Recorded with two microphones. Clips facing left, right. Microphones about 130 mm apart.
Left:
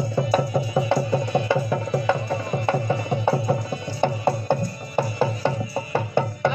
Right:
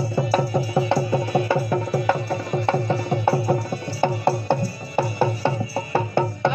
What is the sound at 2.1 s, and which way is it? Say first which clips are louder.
Music: even; 15° left (ahead or behind).